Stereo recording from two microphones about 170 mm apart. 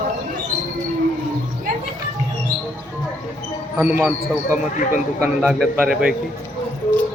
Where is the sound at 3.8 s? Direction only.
5° right (ahead or behind).